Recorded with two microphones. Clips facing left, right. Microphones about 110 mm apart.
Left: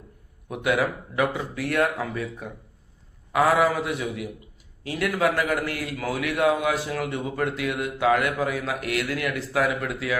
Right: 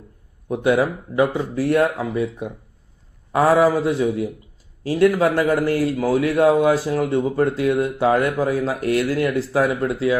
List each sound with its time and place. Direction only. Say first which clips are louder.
0.4 s a man's voice: right 6 dB; 30° right (ahead or behind)